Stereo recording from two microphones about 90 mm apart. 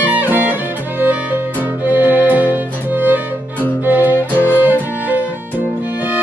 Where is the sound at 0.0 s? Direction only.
20° right (ahead or behind).